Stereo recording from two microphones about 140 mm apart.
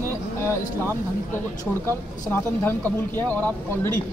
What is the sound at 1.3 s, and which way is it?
Speech, 15° left (ahead or behind).